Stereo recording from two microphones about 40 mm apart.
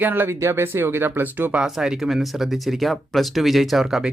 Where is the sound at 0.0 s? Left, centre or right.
Right.